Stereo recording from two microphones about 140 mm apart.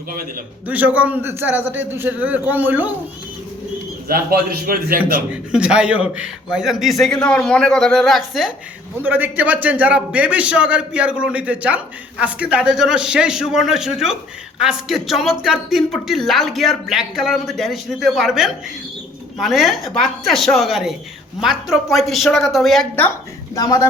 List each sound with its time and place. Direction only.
0.7 s a man's voice: 10° right (ahead or behind)
4.1 s a man's voice: 90° right
5.3 s speech: 5° right (ahead or behind)
9.0 s a man's voice: 15° right (ahead or behind)
23.6 s speech: 25° left (ahead or behind)